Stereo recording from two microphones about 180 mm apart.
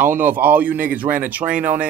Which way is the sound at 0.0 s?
10° right (ahead or behind).